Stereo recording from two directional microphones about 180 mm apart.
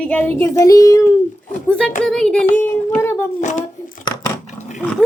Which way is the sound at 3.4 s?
40° left (ahead or behind).